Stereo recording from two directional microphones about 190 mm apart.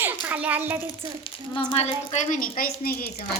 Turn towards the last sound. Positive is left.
turn(degrees=55)  # may be behind; listen again after turning